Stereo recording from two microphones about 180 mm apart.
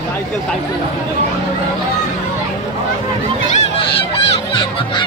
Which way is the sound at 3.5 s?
30° left (ahead or behind).